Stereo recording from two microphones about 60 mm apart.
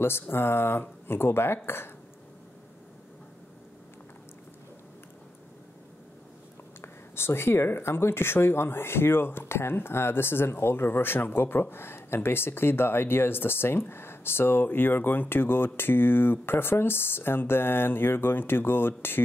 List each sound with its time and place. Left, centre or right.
0.0 s speech: left
6.8 s speech: left